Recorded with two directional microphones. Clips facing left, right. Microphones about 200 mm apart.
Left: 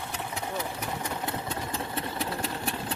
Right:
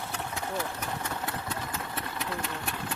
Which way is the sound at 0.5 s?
15° left (ahead or behind).